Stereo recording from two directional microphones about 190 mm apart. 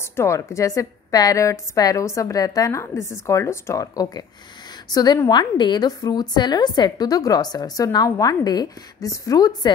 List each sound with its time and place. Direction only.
0.1 s a woman's voice: 15° left (ahead or behind)